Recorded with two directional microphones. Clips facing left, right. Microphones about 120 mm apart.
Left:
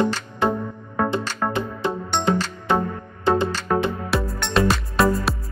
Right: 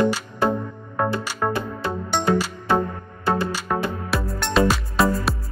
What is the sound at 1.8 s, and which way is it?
Music, 20° left (ahead or behind).